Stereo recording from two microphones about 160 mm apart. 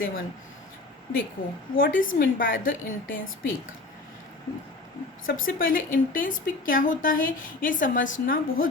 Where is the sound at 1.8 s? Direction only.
60° left (ahead or behind).